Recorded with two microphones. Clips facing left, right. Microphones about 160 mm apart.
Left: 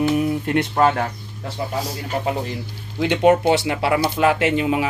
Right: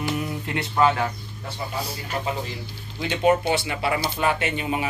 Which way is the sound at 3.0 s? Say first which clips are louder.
Left 5 dB; 65° left (ahead or behind).